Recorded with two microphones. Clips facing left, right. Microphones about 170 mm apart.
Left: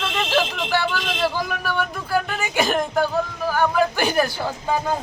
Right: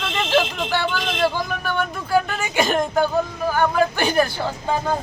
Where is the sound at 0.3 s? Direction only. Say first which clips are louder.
Right 3 dB; 5° left (ahead or behind).